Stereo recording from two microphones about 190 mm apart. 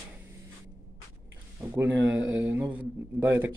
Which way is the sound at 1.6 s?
15° right (ahead or behind).